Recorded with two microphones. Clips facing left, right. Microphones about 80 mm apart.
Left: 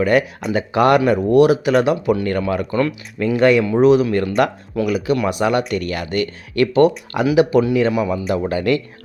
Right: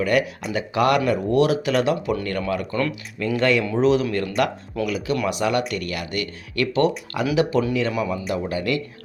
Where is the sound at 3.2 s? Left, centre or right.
Left.